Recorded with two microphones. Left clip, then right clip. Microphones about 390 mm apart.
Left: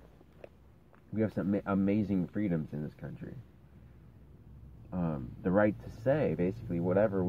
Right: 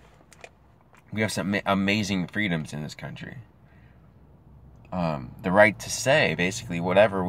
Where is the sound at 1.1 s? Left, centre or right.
Centre.